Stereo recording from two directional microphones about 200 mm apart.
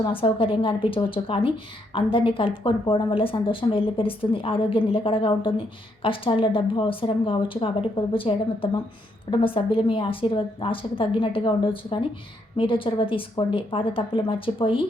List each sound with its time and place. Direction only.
0.0 s a woman's voice: 25° left (ahead or behind)